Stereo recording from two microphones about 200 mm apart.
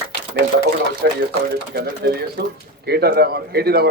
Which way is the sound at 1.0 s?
60° right (ahead or behind).